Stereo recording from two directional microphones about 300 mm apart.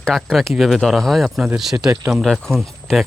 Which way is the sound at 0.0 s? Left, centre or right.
Centre.